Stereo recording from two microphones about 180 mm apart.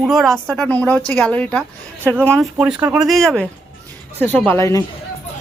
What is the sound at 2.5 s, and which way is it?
Speech, 10° right (ahead or behind).